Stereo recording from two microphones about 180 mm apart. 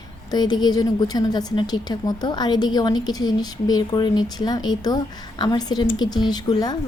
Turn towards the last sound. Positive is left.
turn(degrees=25)  # may be behind; listen again after turning